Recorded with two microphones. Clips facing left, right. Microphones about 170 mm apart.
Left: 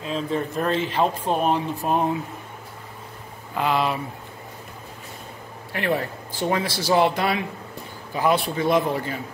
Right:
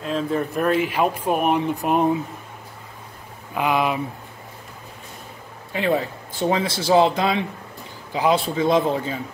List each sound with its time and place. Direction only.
0.0 s speech: centre (ahead or behind)
3.5 s speech: 15° right (ahead or behind)
5.7 s speech: 20° right (ahead or behind)